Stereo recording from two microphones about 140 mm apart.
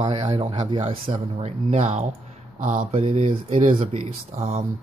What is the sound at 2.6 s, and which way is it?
Mantra, 60° right (ahead or behind).